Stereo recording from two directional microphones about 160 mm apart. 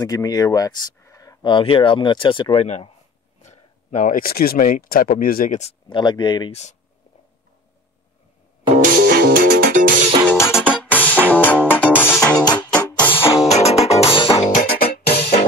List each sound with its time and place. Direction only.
0.0 s speech: 25° left (ahead or behind); by 2.9 s 40° left (ahead or behind)
3.4 s speech: 50° left (ahead or behind)
5.9 s speech: 30° left (ahead or behind)
6.5 s speech: 45° left (ahead or behind)
8.7 s music: 60° right (ahead or behind)
10.2 s music: 15° left (ahead or behind)
12.4 s music: 25° left (ahead or behind)
12.7 s music: 10° left (ahead or behind)
13.5 s music: 40° left (ahead or behind)
14.6 s music: 65° left (ahead or behind)